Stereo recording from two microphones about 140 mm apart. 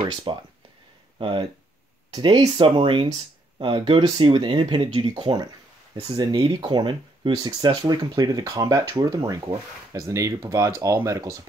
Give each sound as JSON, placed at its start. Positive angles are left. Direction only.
{"t": 0.3, "sound": "speech", "side_deg": -35}
{"t": 5.1, "sound": "speech", "side_deg": -30}